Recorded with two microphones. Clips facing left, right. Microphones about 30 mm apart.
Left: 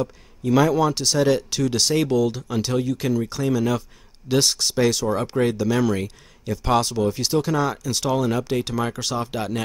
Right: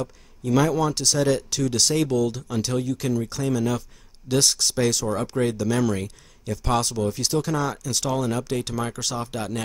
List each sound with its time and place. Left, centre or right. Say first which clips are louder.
0.0 s speech: left 4 dB; centre